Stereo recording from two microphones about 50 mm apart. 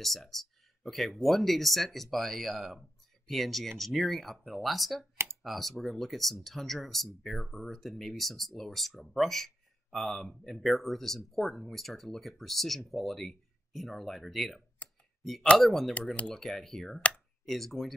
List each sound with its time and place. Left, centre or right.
0.0 s speech: centre
5.1 s computer keyboard: right
5.4 s speech: centre
14.8 s a sound: left
15.5 s speech: centre